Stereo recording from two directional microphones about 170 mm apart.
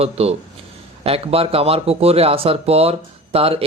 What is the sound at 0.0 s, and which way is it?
A man's voice, 35° right (ahead or behind).